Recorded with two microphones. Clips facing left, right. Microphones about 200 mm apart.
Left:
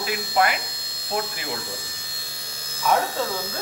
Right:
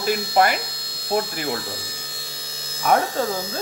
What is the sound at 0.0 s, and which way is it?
Speech, 40° right (ahead or behind).